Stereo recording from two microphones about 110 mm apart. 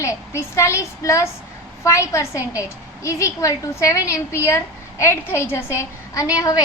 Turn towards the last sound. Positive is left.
turn(degrees=30)  # may be behind; listen again after turning